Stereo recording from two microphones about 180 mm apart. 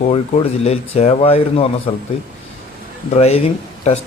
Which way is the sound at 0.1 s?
35° left (ahead or behind).